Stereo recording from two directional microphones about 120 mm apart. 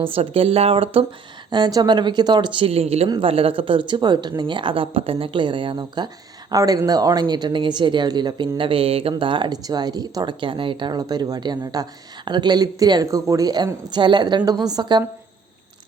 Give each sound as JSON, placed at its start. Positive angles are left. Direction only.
{"t": 0.0, "sound": "a woman's voice", "side_deg": -50}
{"t": 1.5, "sound": "speech", "side_deg": -35}
{"t": 2.6, "sound": "a woman's voice", "side_deg": -60}